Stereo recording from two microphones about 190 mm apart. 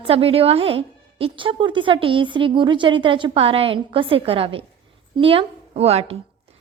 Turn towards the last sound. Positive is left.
turn(degrees=-35)  # may be behind; listen again after turning